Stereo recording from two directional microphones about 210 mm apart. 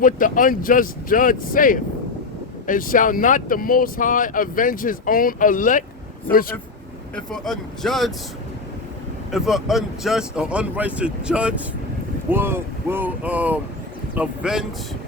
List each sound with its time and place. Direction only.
0.0 s speech: 40° left (ahead or behind)
7.3 s speech: centre (ahead or behind)
9.3 s speech: centre (ahead or behind)